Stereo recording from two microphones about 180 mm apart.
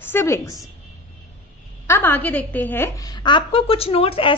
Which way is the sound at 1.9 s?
10° left (ahead or behind).